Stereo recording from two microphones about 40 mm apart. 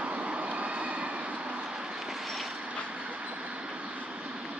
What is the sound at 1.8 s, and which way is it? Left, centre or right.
Train, centre.